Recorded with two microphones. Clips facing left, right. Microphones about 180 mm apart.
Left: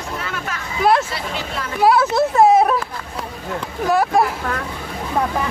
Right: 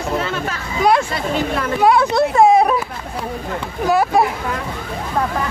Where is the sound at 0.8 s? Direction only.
5° left (ahead or behind).